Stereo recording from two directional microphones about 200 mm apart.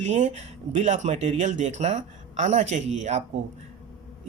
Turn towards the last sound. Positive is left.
turn(degrees=-35)  # may be behind; listen again after turning